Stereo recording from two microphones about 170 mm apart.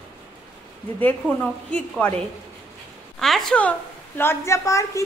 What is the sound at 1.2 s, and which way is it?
Speech, 5° left (ahead or behind).